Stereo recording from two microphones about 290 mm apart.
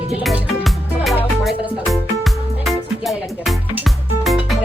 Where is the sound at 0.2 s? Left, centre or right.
Centre.